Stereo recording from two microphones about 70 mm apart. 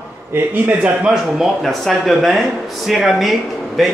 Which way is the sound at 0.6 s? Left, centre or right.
Right.